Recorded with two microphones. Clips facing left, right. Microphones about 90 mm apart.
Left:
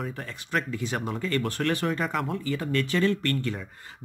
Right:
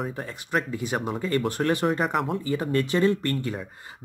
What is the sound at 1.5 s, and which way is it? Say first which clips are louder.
Speech: right 3 dB; 20° right (ahead or behind).